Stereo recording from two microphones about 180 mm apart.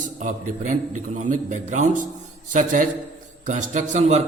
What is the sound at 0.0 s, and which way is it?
A man's voice, 45° right (ahead or behind).